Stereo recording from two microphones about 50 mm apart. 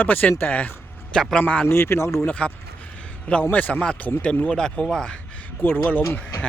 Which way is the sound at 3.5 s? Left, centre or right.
Left.